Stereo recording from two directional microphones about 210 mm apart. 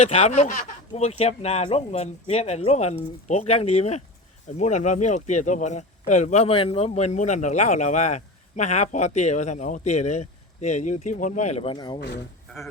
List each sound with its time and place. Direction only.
0.0 s speech: 30° left (ahead or behind)
11.9 s speech: 50° left (ahead or behind)